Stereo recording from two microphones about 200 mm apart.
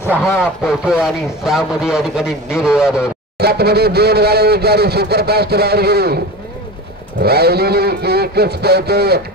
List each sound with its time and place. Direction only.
0.4 s a man's voice: centre (ahead or behind)
3.3 s speech: 55° right (ahead or behind)
7.2 s speech: 50° right (ahead or behind)